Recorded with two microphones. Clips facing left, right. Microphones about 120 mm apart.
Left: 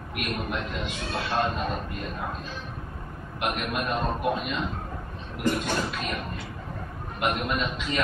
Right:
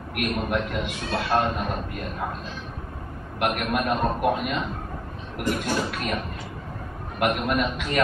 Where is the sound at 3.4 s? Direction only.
60° right (ahead or behind).